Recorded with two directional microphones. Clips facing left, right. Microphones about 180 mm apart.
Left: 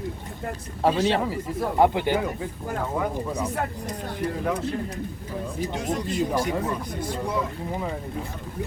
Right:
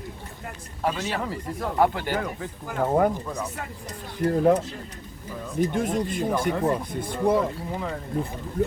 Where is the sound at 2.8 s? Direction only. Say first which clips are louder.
Right 8 dB; 50° right (ahead or behind).